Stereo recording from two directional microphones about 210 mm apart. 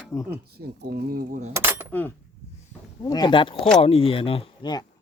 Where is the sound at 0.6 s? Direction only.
50° right (ahead or behind).